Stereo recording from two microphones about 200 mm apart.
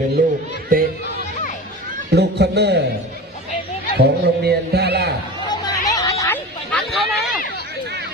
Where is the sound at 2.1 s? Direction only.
55° right (ahead or behind).